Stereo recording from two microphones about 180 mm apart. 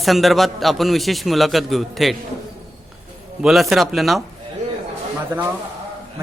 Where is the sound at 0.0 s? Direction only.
Centre (ahead or behind).